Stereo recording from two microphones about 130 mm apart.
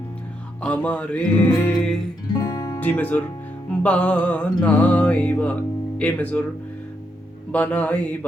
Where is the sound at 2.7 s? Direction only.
10° left (ahead or behind).